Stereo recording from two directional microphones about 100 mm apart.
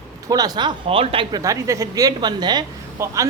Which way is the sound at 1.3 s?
35° right (ahead or behind).